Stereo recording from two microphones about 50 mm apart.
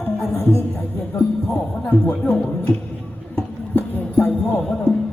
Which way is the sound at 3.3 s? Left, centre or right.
Left.